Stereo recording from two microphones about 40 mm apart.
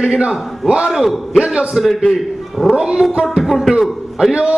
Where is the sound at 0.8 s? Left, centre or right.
Centre.